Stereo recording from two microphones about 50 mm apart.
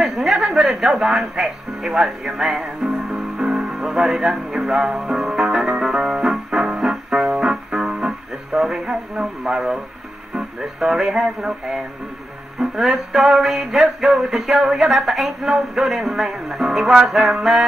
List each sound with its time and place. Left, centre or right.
0.0 s a sound: centre
0.6 s speech: centre
2.9 s music: centre
3.8 s speech: centre
4.6 s music: right
4.9 s music: centre
6.5 s music: right
6.9 s music: centre
8.5 s speech: centre
12.5 s music: centre
14.9 s speech: centre
17.1 s music: centre